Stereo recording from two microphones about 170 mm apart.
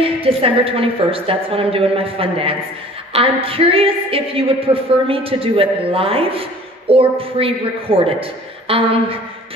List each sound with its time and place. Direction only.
0.0 s a woman's voice: 35° right (ahead or behind)